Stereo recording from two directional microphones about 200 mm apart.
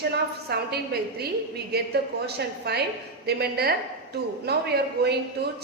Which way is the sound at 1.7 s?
55° right (ahead or behind).